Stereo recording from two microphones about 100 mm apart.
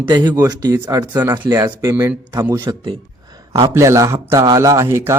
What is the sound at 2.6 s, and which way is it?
Speech, 45° right (ahead or behind).